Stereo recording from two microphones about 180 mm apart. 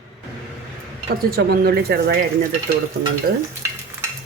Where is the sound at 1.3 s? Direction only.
60° right (ahead or behind).